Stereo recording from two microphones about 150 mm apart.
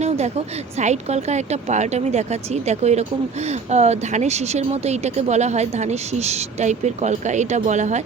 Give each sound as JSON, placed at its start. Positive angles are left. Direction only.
{"t": 0.8, "sound": "speech", "side_deg": -50}